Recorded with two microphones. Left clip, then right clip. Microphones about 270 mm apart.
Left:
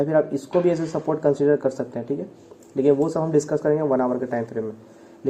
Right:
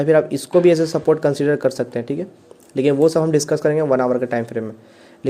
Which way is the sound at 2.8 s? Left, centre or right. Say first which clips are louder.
Right 5 dB; right.